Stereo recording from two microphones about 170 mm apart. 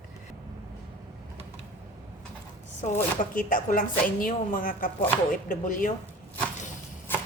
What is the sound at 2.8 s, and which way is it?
Speech, 50° left (ahead or behind).